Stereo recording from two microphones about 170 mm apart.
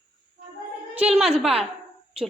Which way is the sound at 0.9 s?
5° right (ahead or behind).